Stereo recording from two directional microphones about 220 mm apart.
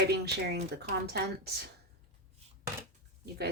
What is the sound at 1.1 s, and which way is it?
Speech, 45° right (ahead or behind).